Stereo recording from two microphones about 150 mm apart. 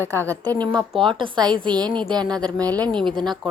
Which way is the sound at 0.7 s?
Centre (ahead or behind).